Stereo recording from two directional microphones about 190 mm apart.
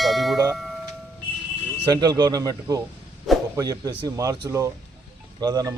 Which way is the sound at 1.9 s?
20° right (ahead or behind).